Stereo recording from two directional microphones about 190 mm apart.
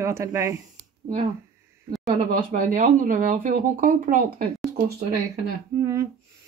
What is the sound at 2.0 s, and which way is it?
Speech, 45° right (ahead or behind).